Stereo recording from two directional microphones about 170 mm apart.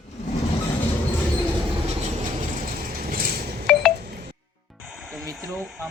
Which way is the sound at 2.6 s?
55° right (ahead or behind).